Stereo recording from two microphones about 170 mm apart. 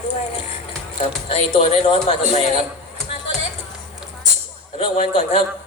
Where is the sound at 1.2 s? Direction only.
40° left (ahead or behind).